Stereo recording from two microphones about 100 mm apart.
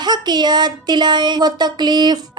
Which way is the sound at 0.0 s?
45° right (ahead or behind).